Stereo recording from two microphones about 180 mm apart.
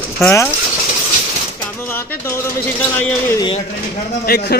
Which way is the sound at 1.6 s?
10° left (ahead or behind).